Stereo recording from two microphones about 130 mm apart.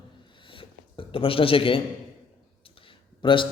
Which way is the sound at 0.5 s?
45° left (ahead or behind).